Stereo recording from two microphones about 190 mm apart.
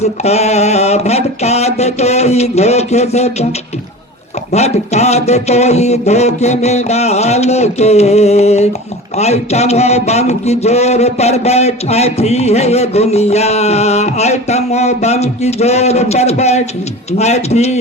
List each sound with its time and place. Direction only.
0.0 s a man's voice: 35° left (ahead or behind)
4.5 s a man's voice: 35° left (ahead or behind)